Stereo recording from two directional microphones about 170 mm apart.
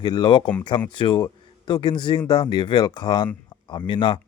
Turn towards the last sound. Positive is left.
turn(degrees=30)  # may be behind; listen again after turning